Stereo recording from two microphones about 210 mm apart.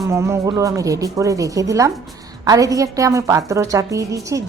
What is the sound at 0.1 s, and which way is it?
A woman's voice, 15° right (ahead or behind).